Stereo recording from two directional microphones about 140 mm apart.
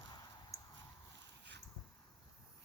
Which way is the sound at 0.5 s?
20° left (ahead or behind).